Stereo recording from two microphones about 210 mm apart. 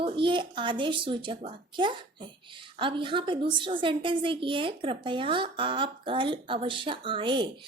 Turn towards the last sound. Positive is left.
turn(degrees=-20)  # may be behind; listen again after turning